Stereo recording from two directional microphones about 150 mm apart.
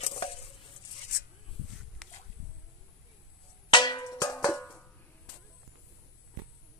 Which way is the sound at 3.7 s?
30° left (ahead or behind).